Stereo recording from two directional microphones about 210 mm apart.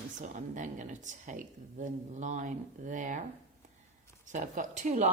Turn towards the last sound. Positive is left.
turn(degrees=-35)  # may be behind; listen again after turning